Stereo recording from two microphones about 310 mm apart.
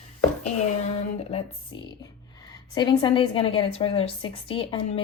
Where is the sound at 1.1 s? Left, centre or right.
Centre.